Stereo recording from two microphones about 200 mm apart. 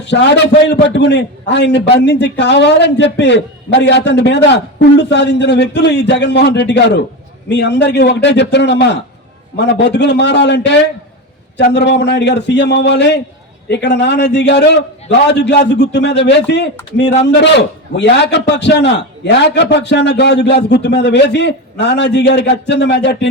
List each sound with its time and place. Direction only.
0.0 s a man's voice: 60° left (ahead or behind)